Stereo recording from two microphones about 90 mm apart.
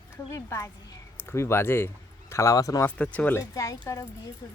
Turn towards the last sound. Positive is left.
turn(degrees=35)  # may be behind; listen again after turning